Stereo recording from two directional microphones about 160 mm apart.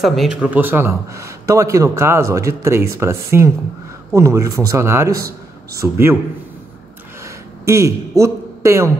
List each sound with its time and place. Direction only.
0.0 s speech: centre (ahead or behind)
0.5 s a man's voice: 10° right (ahead or behind)
7.2 s a sound: 20° right (ahead or behind)